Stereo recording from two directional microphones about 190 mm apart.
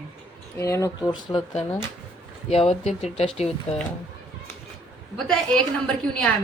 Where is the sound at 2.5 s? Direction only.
30° left (ahead or behind).